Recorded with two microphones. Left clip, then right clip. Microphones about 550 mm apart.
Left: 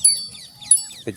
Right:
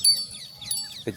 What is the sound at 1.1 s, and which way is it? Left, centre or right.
Goat, right.